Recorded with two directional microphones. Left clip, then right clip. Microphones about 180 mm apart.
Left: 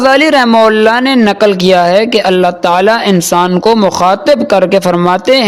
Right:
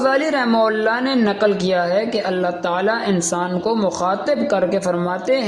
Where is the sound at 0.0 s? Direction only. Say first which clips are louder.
Left 11 dB; 45° left (ahead or behind).